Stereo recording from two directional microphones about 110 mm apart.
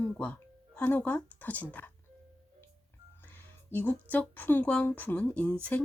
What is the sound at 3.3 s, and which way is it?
Speech, 15° left (ahead or behind).